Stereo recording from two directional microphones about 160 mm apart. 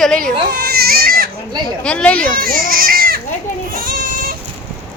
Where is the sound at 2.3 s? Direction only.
65° right (ahead or behind).